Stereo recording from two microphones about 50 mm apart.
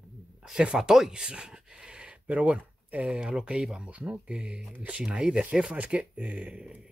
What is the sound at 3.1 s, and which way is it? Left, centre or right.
Speech, centre.